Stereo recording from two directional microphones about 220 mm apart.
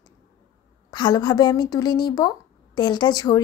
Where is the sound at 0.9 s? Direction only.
20° left (ahead or behind).